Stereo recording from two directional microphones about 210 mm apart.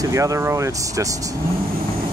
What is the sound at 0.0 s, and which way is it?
Speech, 15° right (ahead or behind).